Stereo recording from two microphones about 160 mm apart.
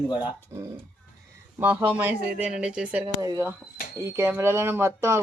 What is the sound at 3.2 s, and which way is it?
Speech, 20° right (ahead or behind).